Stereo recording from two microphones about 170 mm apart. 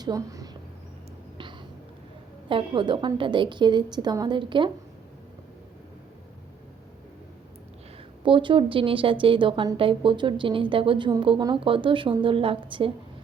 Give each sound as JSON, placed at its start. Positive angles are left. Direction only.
{"t": 0.0, "sound": "a woman's voice", "side_deg": -20}
{"t": 2.5, "sound": "speech", "side_deg": -30}
{"t": 8.2, "sound": "speech", "side_deg": -30}